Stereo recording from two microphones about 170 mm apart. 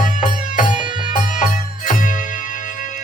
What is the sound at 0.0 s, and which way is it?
Music, 45° left (ahead or behind).